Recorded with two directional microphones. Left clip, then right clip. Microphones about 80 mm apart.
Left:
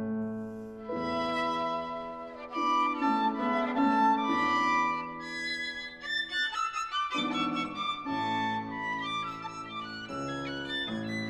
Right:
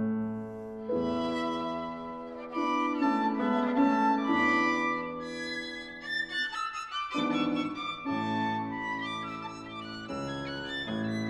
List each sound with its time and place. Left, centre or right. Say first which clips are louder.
0.0 s music: right 2 dB; right
0.8 s music: right 1 dB; left
10.2 s music: left 2 dB; left